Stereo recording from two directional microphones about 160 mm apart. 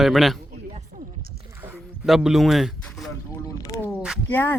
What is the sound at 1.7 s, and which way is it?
Speech, 5° right (ahead or behind).